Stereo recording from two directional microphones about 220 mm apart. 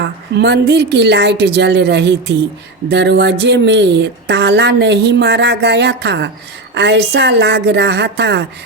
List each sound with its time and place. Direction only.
0.0 s speech: 50° right (ahead or behind)